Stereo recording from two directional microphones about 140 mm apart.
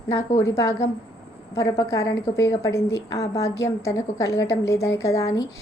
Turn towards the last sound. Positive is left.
turn(degrees=20)  # may be behind; listen again after turning